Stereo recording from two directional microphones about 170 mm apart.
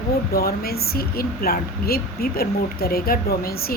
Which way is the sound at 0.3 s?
65° left (ahead or behind).